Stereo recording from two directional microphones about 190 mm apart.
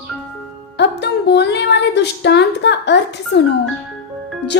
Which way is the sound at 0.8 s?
65° left (ahead or behind).